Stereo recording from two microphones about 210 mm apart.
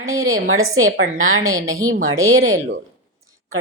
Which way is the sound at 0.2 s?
75° right (ahead or behind).